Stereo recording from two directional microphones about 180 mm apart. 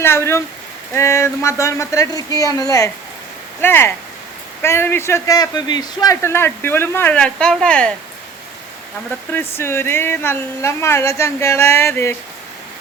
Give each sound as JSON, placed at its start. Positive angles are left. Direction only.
{"t": 0.0, "sound": "a man's voice", "side_deg": 15}
{"t": 9.3, "sound": "a man's voice", "side_deg": 15}